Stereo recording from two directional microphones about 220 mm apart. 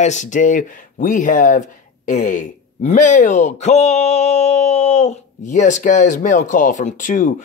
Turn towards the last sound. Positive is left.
turn(degrees=35)  # may be behind; listen again after turning